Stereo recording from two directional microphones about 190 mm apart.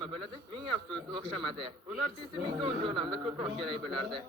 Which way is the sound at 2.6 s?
25° right (ahead or behind).